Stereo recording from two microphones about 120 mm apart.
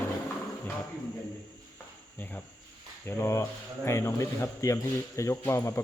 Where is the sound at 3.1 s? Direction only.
25° left (ahead or behind).